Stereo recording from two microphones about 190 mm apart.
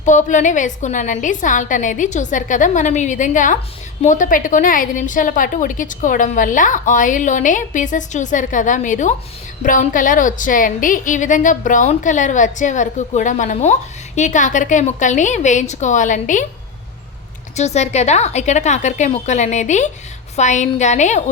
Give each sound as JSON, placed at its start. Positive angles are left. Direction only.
{"t": 0.0, "sound": "a woman's voice", "side_deg": 40}
{"t": 17.6, "sound": "a woman's voice", "side_deg": 35}